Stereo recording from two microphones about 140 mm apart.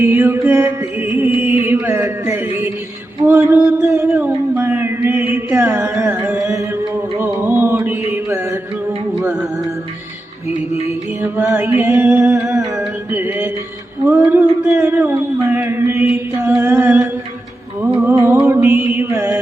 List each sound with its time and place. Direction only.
0.0 s music: 15° right (ahead or behind)
10.5 s music: 50° left (ahead or behind)
11.2 s music: 15° right (ahead or behind)
18.3 s mantra: 15° right (ahead or behind)